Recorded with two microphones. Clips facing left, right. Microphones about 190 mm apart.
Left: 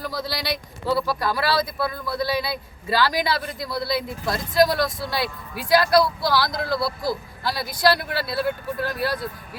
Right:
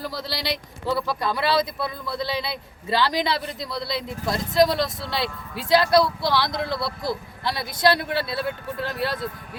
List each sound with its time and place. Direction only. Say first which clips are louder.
0.0 s speech: left 1 dB; centre (ahead or behind)
1.2 s speech: even; 20° right (ahead or behind)